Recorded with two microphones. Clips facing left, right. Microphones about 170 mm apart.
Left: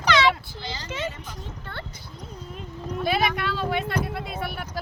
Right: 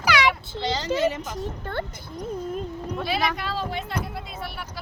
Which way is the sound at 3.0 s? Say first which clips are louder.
Left 3 dB; 60° left (ahead or behind).